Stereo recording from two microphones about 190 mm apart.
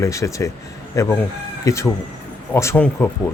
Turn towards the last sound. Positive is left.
turn(degrees=15)  # may be behind; listen again after turning